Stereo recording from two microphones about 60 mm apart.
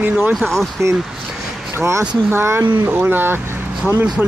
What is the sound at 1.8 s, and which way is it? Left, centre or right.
Speech, right.